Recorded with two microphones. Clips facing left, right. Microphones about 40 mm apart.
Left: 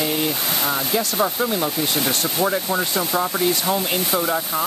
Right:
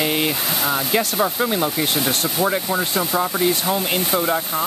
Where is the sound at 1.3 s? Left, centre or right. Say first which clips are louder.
Right 1 dB; centre.